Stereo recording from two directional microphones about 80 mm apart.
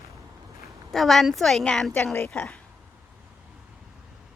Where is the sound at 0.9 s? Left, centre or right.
Centre.